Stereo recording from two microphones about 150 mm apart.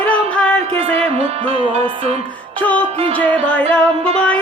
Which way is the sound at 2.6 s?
10° left (ahead or behind).